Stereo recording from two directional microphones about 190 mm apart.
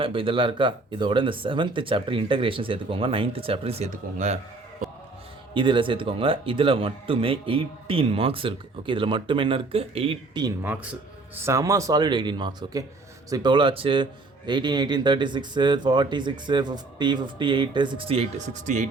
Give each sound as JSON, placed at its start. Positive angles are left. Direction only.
{"t": 0.0, "sound": "speech", "side_deg": -25}
{"t": 5.5, "sound": "speech", "side_deg": -25}
{"t": 11.4, "sound": "speech", "side_deg": -15}